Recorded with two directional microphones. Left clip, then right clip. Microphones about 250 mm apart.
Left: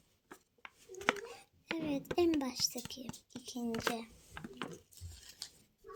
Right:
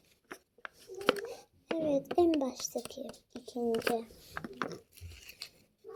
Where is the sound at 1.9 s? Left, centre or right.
Left.